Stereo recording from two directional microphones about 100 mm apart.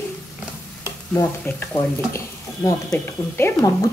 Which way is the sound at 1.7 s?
35° left (ahead or behind).